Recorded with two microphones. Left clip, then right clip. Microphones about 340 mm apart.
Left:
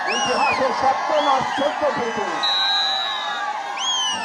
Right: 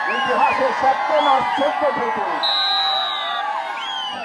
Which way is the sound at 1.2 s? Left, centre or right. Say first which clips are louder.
Right 3 dB; right.